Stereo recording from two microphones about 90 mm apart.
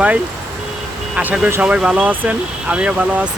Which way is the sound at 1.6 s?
10° right (ahead or behind).